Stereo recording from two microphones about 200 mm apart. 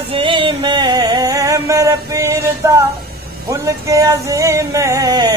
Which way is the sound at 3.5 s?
15° right (ahead or behind).